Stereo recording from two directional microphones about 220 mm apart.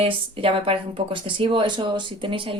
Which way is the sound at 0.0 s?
25° right (ahead or behind).